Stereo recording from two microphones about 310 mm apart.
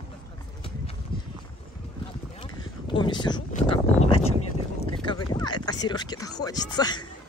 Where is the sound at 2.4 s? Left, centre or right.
Centre.